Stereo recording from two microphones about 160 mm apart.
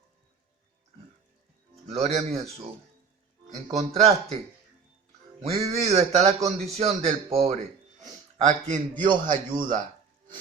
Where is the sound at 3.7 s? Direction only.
45° right (ahead or behind).